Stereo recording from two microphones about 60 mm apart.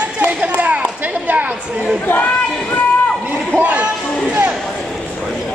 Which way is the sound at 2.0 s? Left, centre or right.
Left.